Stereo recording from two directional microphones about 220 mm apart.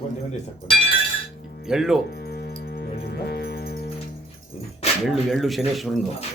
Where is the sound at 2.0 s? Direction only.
45° left (ahead or behind).